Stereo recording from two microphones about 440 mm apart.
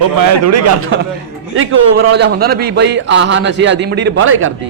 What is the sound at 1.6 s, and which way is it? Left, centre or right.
A man's voice, right.